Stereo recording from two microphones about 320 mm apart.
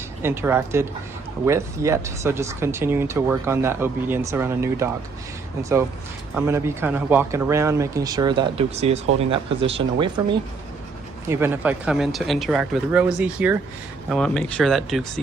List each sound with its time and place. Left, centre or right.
0.2 s speech: centre
6.3 s speech: centre
11.3 s speech: centre